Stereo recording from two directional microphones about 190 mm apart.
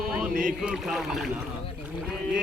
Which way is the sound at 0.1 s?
5° right (ahead or behind).